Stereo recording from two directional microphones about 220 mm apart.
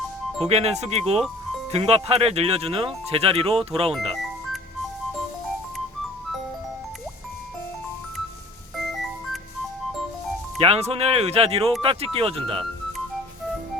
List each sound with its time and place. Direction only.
0.4 s speech: 30° right (ahead or behind)
3.9 s music: centre (ahead or behind)
8.8 s music: centre (ahead or behind)
10.6 s speech: 30° right (ahead or behind)